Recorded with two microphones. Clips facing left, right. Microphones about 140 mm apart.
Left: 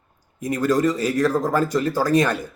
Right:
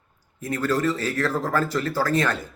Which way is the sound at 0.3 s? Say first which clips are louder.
Left 4 dB; 15° left (ahead or behind).